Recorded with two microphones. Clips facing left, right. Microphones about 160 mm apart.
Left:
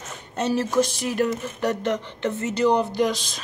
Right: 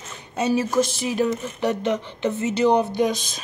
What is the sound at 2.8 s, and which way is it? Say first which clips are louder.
Speech: right 1 dB; 50° right (ahead or behind).